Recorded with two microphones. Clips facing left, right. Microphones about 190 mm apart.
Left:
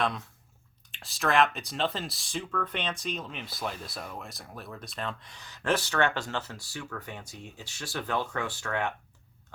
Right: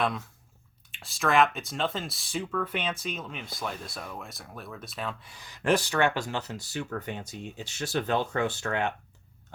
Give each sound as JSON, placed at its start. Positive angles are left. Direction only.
{"t": 0.9, "sound": "speech", "side_deg": 0}